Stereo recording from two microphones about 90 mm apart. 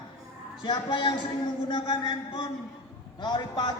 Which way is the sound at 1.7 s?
55° left (ahead or behind).